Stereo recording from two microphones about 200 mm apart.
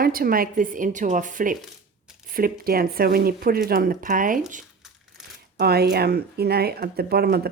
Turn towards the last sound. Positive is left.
turn(degrees=-50)  # may be behind; listen again after turning